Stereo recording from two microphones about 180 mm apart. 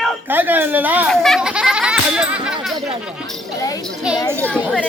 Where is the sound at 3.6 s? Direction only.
20° left (ahead or behind).